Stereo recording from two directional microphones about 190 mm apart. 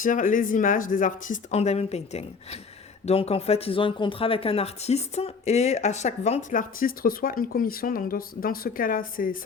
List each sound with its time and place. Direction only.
0.0 s speech: 45° left (ahead or behind)